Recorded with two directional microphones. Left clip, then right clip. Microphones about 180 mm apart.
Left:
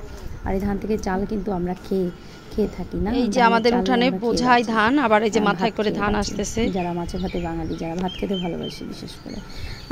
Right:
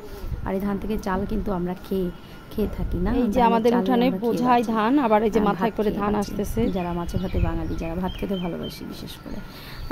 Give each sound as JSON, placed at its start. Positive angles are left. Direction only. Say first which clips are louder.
{"t": 0.5, "sound": "speech", "louder": "left 3 dB", "side_deg": 5}
{"t": 8.4, "sound": "speech", "louder": "left 3 dB", "side_deg": -15}